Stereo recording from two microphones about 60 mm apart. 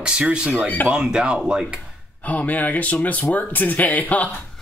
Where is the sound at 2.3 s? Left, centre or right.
Left.